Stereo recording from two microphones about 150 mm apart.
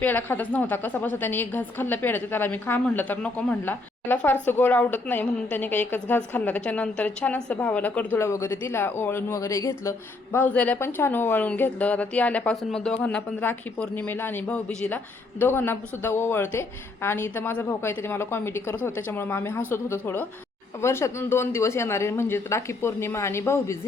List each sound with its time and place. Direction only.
0.0 s speech: 10° left (ahead or behind)